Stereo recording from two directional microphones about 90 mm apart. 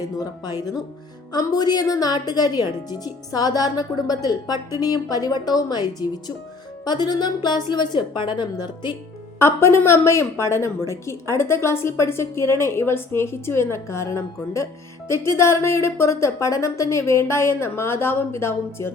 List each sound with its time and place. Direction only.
0.2 s a woman's voice: 45° left (ahead or behind)
9.4 s a woman's voice: 30° left (ahead or behind)